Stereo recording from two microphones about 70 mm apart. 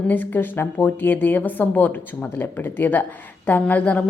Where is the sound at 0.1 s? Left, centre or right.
Left.